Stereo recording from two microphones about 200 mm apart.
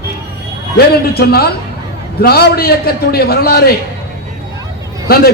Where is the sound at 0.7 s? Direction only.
50° left (ahead or behind).